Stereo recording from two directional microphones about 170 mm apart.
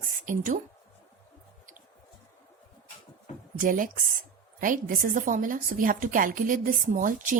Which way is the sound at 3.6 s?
50° right (ahead or behind).